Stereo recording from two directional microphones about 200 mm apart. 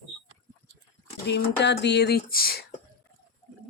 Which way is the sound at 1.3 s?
55° left (ahead or behind).